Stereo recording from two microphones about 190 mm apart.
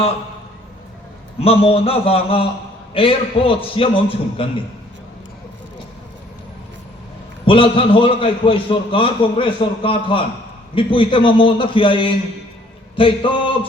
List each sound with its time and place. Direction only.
1.4 s a man's voice: 30° left (ahead or behind)
7.4 s a man's voice: 25° left (ahead or behind)